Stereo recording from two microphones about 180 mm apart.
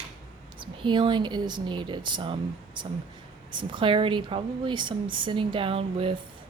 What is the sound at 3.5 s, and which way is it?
Speech, 25° right (ahead or behind).